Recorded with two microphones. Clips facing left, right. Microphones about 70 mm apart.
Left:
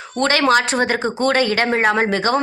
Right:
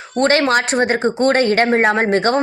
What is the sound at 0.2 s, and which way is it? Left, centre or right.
A woman's voice, right.